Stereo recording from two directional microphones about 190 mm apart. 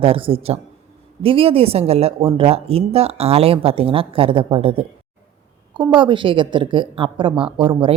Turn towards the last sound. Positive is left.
turn(degrees=-25)  # may be behind; listen again after turning